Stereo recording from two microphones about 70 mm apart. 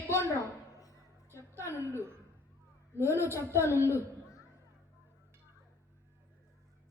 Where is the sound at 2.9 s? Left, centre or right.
Left.